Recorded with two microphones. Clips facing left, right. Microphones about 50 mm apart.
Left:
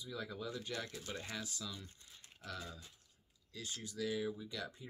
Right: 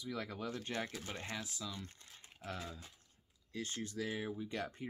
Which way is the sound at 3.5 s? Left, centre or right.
Right.